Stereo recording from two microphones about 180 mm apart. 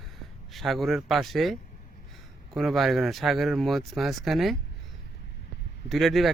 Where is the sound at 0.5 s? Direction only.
Centre (ahead or behind).